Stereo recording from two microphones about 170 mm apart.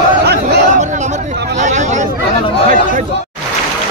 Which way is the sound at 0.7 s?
45° right (ahead or behind).